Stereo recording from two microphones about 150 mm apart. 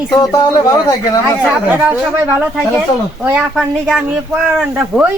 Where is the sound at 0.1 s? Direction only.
25° left (ahead or behind).